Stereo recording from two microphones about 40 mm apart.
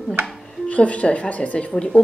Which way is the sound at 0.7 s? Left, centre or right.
Left.